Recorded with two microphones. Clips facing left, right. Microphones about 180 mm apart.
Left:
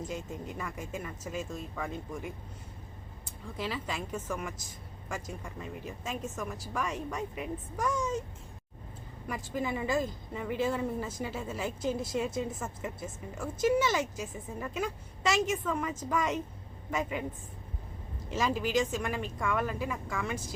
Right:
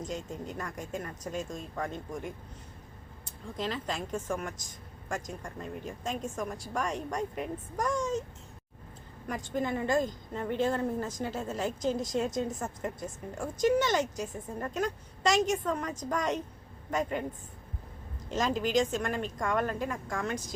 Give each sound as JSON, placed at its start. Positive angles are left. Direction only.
{"t": 0.0, "sound": "a woman's voice", "side_deg": 5}
{"t": 3.6, "sound": "a woman's voice", "side_deg": 5}
{"t": 9.2, "sound": "a woman's voice", "side_deg": 5}
{"t": 18.3, "sound": "speech", "side_deg": 5}